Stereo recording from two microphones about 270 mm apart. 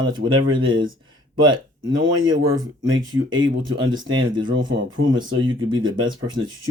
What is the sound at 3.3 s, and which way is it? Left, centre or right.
Speech, right.